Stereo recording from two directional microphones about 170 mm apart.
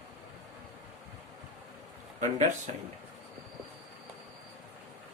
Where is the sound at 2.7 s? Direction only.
40° right (ahead or behind).